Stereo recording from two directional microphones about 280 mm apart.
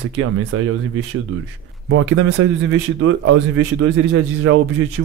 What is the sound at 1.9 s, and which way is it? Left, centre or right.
Speech, right.